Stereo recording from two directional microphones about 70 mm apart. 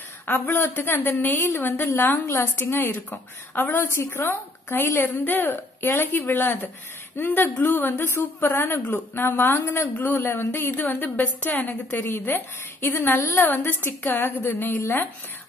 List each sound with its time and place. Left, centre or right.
0.3 s a woman's voice: left
1.3 s a woman's voice: left